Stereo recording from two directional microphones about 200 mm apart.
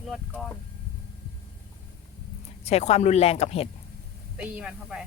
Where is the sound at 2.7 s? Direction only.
30° left (ahead or behind).